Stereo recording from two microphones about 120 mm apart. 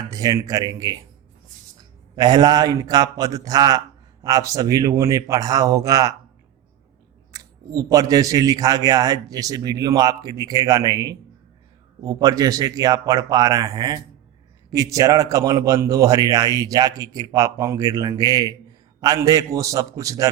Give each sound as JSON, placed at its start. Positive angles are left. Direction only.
{"t": 0.1, "sound": "a man's voice", "side_deg": -30}
{"t": 7.3, "sound": "a man's voice", "side_deg": -30}